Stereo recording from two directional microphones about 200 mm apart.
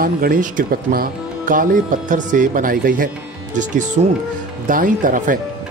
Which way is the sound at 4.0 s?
35° right (ahead or behind).